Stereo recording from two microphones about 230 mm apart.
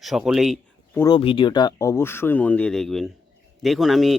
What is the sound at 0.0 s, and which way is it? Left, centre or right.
Speech, centre.